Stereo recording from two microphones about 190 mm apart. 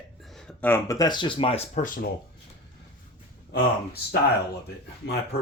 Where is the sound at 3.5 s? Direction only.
60° left (ahead or behind).